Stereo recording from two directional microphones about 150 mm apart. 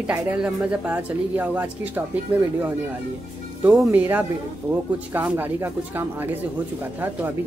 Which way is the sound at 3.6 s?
10° right (ahead or behind).